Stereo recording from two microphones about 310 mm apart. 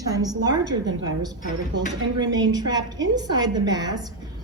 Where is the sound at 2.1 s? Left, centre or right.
Centre.